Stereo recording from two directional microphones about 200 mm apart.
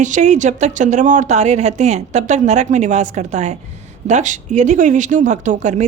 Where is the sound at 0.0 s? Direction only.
35° right (ahead or behind).